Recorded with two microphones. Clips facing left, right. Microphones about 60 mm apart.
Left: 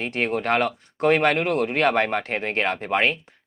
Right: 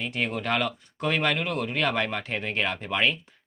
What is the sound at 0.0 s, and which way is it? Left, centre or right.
Speech, left.